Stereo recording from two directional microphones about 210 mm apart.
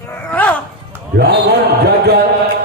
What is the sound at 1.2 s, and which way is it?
A man's voice, 50° right (ahead or behind).